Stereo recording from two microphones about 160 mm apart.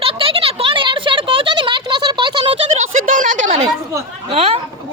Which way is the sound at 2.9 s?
55° right (ahead or behind).